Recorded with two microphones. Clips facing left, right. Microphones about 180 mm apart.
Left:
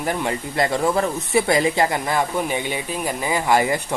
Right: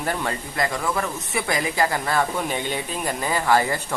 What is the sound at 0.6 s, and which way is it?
Speech, 30° left (ahead or behind).